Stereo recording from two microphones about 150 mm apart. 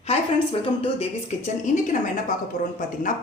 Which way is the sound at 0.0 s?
40° left (ahead or behind).